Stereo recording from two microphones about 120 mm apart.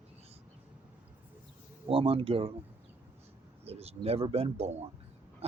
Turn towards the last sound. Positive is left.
turn(degrees=-60)  # may be behind; listen again after turning